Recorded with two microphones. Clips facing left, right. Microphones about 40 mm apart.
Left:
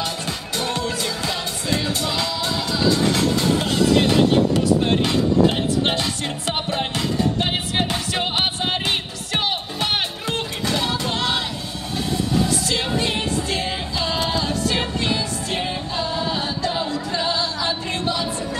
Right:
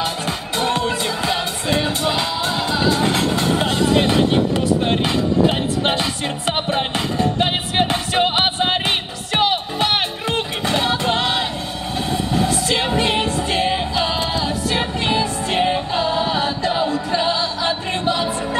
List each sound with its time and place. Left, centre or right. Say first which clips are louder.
0.6 s music: right 5 dB; right
15.0 s music: right 4 dB; right